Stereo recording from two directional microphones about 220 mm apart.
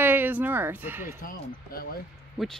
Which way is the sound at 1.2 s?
40° left (ahead or behind).